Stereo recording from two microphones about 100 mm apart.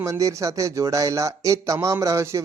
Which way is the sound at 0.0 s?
35° right (ahead or behind).